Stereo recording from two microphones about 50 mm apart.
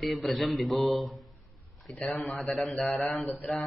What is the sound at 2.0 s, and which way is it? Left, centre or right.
Mantra, centre.